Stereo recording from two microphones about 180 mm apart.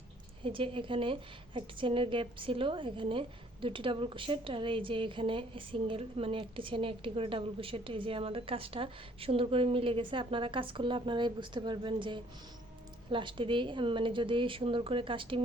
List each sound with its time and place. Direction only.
0.4 s a woman's voice: 30° right (ahead or behind)